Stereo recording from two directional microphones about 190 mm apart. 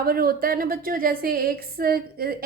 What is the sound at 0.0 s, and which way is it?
A woman's voice, 50° right (ahead or behind).